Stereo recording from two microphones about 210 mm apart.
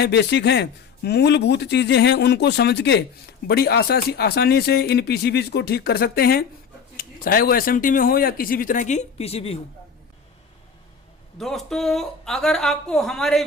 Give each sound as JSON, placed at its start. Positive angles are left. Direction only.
{"t": 0.0, "sound": "speech", "side_deg": 55}
{"t": 11.3, "sound": "a woman's voice", "side_deg": 0}